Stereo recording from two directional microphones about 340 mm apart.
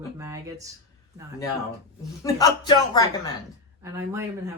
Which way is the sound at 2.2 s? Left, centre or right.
Centre.